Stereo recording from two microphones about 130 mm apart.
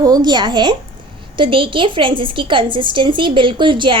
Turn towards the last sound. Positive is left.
turn(degrees=-40)  # may be behind; listen again after turning